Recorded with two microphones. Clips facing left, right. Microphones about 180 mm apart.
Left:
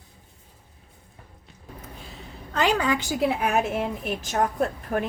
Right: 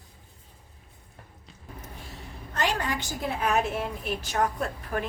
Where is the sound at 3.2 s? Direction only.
55° left (ahead or behind).